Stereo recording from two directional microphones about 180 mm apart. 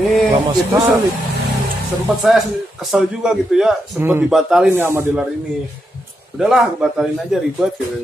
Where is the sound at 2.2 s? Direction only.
Centre (ahead or behind).